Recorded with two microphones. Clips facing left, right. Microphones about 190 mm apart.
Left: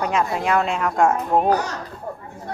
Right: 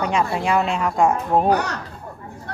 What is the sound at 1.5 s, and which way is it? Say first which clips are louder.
Speech: right 1 dB; 65° right (ahead or behind).